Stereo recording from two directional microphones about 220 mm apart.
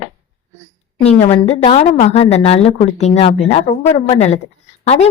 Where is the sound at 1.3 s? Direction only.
25° left (ahead or behind).